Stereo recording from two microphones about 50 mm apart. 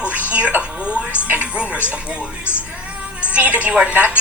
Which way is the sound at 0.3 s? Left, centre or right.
Right.